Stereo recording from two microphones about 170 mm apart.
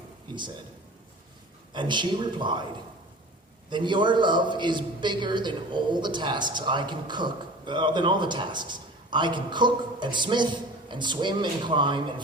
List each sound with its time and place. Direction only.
1.7 s a man's voice: 25° right (ahead or behind)
3.7 s a man's voice: 25° right (ahead or behind)